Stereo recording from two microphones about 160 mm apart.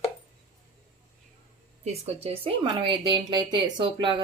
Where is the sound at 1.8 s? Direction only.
40° right (ahead or behind).